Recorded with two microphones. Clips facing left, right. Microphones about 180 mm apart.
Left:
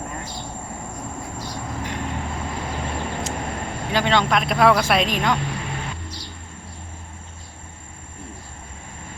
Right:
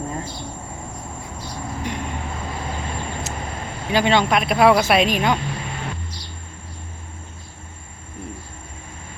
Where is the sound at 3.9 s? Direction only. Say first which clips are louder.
Right 2 dB; 5° right (ahead or behind).